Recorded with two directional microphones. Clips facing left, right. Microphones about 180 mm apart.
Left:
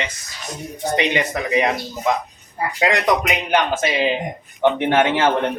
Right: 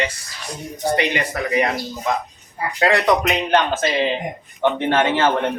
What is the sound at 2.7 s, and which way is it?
A man's voice, 15° left (ahead or behind).